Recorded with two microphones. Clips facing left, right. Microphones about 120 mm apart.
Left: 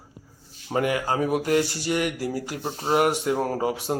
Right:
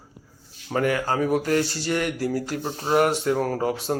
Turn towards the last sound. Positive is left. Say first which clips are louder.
# right 1 dB
turn(degrees=10)  # may be behind; listen again after turning